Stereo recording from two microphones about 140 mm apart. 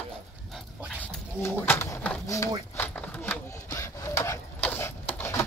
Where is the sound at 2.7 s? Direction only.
15° left (ahead or behind).